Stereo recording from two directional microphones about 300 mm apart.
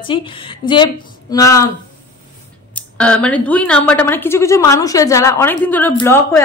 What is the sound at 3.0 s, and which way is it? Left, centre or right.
A woman's voice, centre.